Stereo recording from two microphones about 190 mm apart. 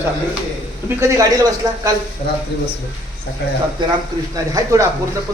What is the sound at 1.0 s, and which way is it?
Speech, 15° right (ahead or behind).